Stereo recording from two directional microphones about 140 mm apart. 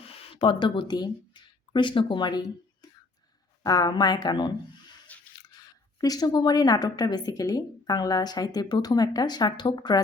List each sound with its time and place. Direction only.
0.0 s speech: 40° left (ahead or behind)
3.6 s a woman's voice: 30° left (ahead or behind)